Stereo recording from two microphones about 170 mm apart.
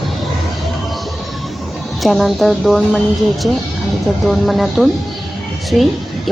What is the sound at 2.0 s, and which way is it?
Speech, centre (ahead or behind).